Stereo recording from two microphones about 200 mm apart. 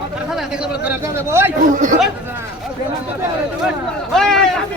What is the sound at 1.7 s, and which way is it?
Chatter, 40° right (ahead or behind).